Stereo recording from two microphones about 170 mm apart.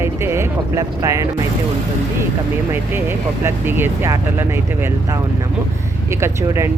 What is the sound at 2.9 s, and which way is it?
Speech, 10° right (ahead or behind).